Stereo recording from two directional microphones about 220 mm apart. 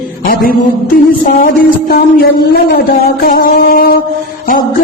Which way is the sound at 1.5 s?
45° left (ahead or behind).